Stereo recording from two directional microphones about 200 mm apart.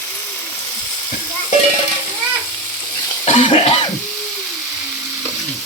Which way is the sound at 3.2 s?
35° left (ahead or behind).